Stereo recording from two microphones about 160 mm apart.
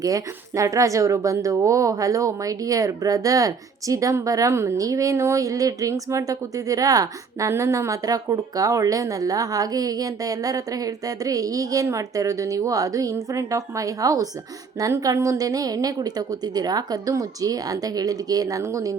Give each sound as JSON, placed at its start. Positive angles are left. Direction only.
{"t": 0.0, "sound": "speech", "side_deg": -20}